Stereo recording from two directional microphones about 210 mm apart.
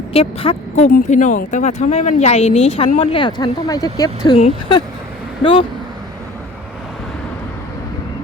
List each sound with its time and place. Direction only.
0.1 s speech: 25° left (ahead or behind)
4.4 s speech: 30° left (ahead or behind)